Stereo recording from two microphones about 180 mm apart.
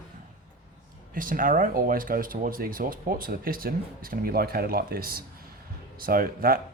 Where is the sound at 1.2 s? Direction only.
50° right (ahead or behind).